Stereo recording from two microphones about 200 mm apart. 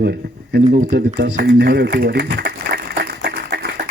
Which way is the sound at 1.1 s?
50° right (ahead or behind).